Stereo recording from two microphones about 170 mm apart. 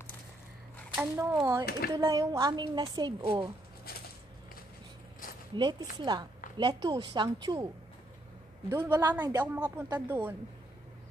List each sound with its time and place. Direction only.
0.9 s a woman's voice: 15° right (ahead or behind)
5.6 s a woman's voice: 25° right (ahead or behind)
8.6 s speech: 15° right (ahead or behind)